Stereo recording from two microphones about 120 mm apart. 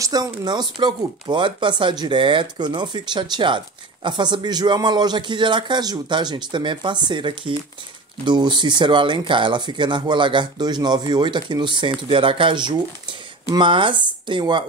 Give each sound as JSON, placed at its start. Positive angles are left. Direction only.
{"t": 0.0, "sound": "speech", "side_deg": -35}